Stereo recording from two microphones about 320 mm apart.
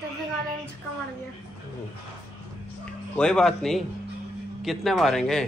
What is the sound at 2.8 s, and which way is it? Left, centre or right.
A man's voice, centre.